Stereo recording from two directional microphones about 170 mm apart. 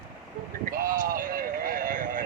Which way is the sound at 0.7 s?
55° right (ahead or behind).